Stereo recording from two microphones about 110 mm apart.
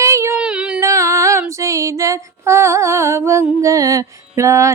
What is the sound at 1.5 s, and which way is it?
Female singing, 30° right (ahead or behind).